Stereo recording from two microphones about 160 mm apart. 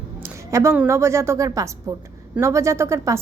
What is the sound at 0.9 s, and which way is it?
Speech, 15° right (ahead or behind).